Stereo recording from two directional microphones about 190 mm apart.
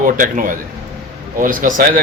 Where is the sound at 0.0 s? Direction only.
45° right (ahead or behind).